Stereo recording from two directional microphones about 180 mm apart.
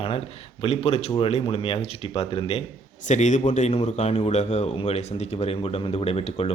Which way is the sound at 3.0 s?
45° left (ahead or behind).